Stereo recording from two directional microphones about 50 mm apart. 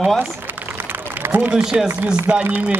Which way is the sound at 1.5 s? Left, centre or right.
Centre.